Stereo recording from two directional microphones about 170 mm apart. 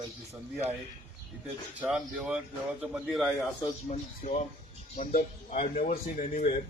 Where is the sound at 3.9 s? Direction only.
45° left (ahead or behind).